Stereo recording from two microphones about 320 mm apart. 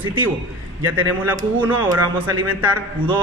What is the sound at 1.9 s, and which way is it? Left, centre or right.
Speech, right.